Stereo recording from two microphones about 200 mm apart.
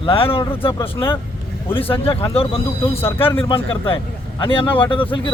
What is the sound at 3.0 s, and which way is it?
Speech, 10° left (ahead or behind).